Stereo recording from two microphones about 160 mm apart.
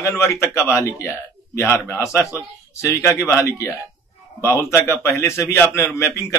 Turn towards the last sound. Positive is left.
turn(degrees=20)  # may be behind; listen again after turning